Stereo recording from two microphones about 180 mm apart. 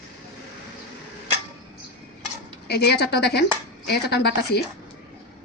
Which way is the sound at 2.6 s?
65° left (ahead or behind).